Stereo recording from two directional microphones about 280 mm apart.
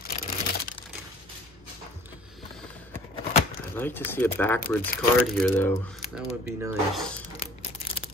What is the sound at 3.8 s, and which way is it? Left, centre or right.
Speech, centre.